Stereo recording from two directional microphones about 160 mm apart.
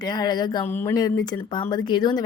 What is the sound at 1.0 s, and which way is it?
Speech, 25° left (ahead or behind).